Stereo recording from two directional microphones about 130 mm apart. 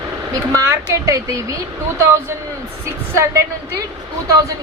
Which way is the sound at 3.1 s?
25° right (ahead or behind).